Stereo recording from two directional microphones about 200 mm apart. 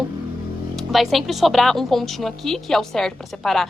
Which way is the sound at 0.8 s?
Centre (ahead or behind).